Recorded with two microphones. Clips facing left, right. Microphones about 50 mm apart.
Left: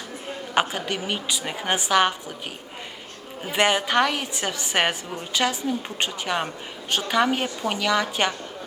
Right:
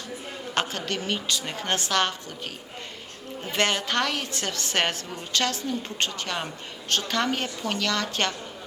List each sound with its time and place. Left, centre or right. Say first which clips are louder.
0.5 s a woman's voice: left 4 dB; centre
3.4 s a woman's voice: left 4 dB; centre